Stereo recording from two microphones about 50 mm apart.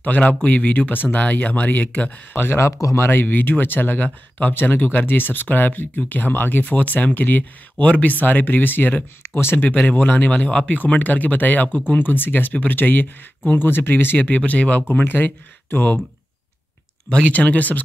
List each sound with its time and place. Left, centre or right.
0.0 s speech: left
2.3 s speech: left
2.6 s speech: left
3.1 s speech: left
9.7 s speech: left
14.9 s speech: left
17.1 s speech: left